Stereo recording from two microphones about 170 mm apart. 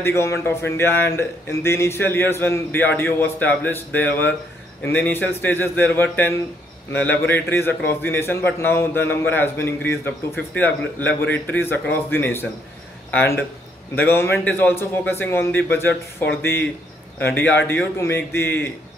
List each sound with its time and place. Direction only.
0.0 s a man's voice: 15° left (ahead or behind)